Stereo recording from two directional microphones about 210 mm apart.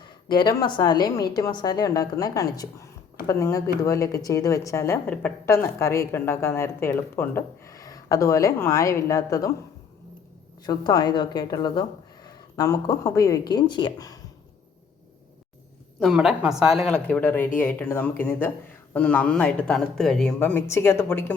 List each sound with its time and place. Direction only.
0.0 s a woman's voice: 20° left (ahead or behind)
10.7 s a woman's voice: 20° left (ahead or behind)
16.0 s a woman's voice: centre (ahead or behind)